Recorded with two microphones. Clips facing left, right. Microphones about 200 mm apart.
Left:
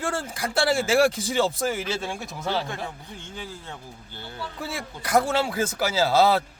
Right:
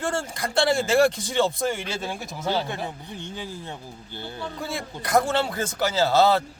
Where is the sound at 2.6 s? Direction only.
15° right (ahead or behind).